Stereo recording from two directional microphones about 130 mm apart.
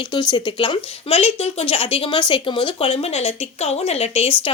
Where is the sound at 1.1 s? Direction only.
50° left (ahead or behind).